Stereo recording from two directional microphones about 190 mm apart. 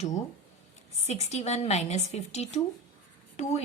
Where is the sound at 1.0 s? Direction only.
35° left (ahead or behind).